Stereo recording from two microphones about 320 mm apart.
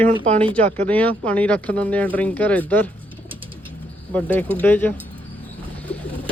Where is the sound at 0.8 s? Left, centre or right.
Centre.